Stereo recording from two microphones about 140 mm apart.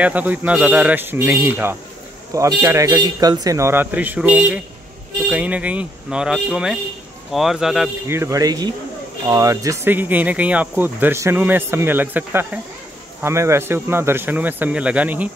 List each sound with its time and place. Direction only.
0.0 s a man's voice: 10° right (ahead or behind)
8.1 s a man's voice: 20° right (ahead or behind)